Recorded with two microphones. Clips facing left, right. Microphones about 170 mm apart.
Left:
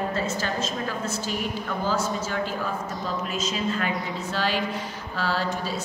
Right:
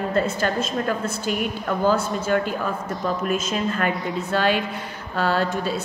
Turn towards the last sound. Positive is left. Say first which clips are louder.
# right 5 dB
turn(degrees=-55)  # may be behind; listen again after turning